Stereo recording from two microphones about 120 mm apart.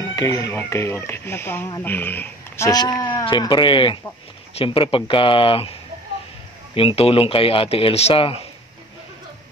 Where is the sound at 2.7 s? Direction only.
35° left (ahead or behind).